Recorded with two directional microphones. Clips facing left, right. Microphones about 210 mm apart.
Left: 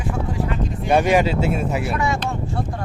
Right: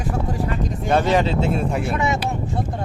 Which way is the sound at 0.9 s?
10° left (ahead or behind).